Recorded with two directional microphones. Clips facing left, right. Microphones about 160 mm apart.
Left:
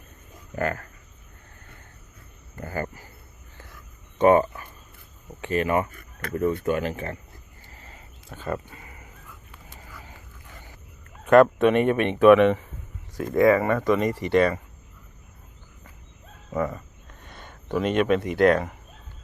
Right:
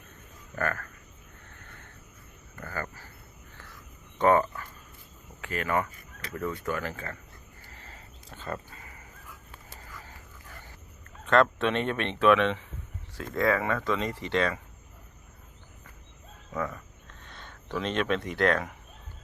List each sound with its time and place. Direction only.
0.5 s speech: 20° left (ahead or behind)
2.6 s speech: 25° left (ahead or behind)
4.2 s a sound: 20° left (ahead or behind)
5.4 s speech: 20° left (ahead or behind)
5.9 s a sound: 55° left (ahead or behind)
6.3 s speech: 25° left (ahead or behind)
8.3 s speech: 15° left (ahead or behind)
9.9 s dog: 15° left (ahead or behind)
11.3 s speech: 10° left (ahead or behind)
16.5 s a sound: 10° left (ahead or behind)